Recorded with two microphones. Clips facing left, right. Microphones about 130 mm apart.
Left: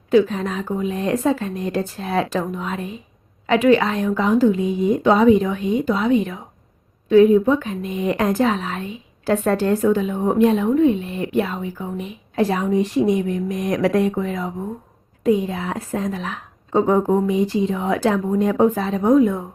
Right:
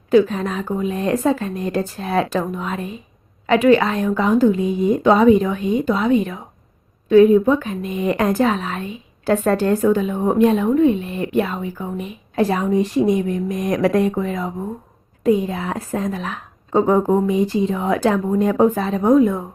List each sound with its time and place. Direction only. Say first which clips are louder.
0.1 s a woman's voice: right 1 dB; 45° right (ahead or behind)